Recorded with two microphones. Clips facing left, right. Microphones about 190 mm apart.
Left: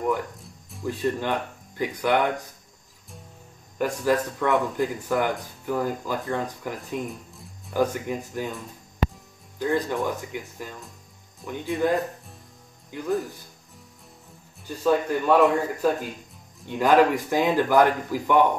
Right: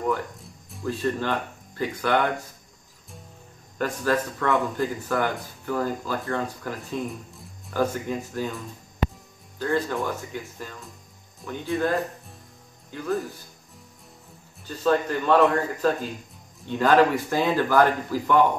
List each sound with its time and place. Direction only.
0.4 s music: centre (ahead or behind)
0.8 s speech: 15° left (ahead or behind)
3.7 s speech: 15° left (ahead or behind)
9.6 s speech: 15° left (ahead or behind)
14.7 s speech: 10° left (ahead or behind)